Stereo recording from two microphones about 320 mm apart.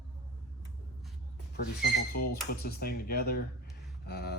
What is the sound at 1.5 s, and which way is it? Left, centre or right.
Speech, left.